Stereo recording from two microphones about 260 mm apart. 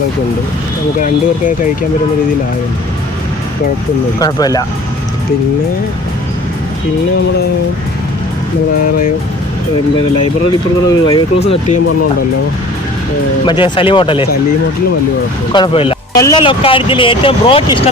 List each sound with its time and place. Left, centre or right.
0.9 s speech: left
4.2 s speech: centre
10.8 s speech: centre
13.4 s speech: centre
15.5 s speech: centre